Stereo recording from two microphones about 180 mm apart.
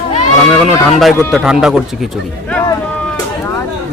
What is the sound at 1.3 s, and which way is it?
Speech, centre (ahead or behind).